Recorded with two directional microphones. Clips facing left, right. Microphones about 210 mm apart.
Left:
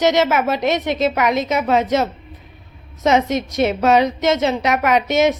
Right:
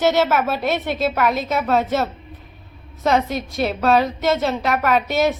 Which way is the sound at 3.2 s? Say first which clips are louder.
Left 4 dB; 20° left (ahead or behind).